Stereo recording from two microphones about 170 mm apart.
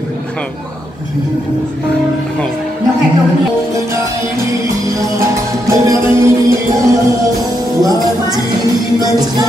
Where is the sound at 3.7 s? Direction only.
15° right (ahead or behind).